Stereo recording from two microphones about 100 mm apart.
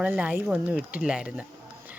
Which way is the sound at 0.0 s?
15° right (ahead or behind).